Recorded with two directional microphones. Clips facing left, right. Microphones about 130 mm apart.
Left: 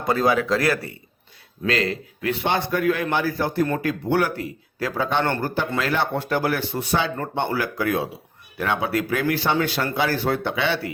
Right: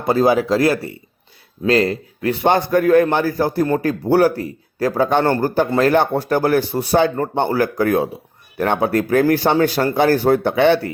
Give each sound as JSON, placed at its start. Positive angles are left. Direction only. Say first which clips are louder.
{"t": 0.0, "sound": "a man's voice", "louder": "right 5 dB", "side_deg": -30}